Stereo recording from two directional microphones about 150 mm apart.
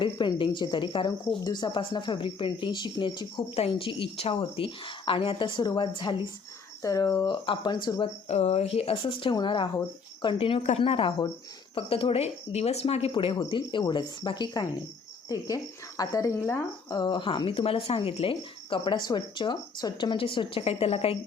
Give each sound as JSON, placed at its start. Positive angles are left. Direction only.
{"t": 0.0, "sound": "speech", "side_deg": 30}
{"t": 8.3, "sound": "speech", "side_deg": 45}